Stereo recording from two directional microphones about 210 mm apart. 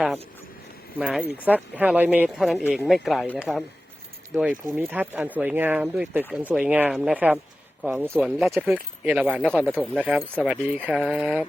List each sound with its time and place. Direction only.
0.9 s speech: 5° right (ahead or behind)